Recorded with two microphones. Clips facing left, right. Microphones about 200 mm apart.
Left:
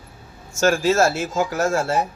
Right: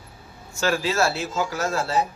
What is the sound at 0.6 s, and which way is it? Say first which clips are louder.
Speech: left 5 dB; 45° left (ahead or behind).